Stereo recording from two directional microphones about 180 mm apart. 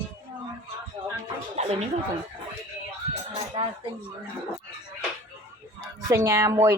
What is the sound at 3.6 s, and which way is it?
Speech, 30° right (ahead or behind).